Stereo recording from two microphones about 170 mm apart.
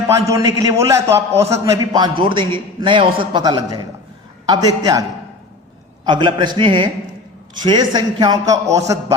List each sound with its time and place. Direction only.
0.1 s a man's voice: 20° right (ahead or behind)
6.1 s a man's voice: 25° right (ahead or behind)